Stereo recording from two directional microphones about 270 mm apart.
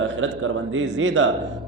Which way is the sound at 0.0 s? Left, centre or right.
Right.